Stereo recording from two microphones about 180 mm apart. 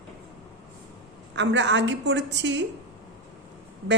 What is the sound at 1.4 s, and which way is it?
A woman's voice, 85° right.